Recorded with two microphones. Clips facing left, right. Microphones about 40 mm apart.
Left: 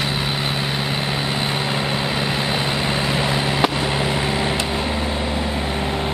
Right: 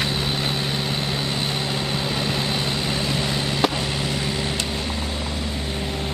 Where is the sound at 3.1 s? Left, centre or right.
Centre.